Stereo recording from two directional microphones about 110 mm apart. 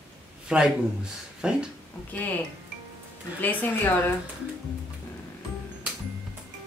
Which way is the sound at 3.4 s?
15° left (ahead or behind).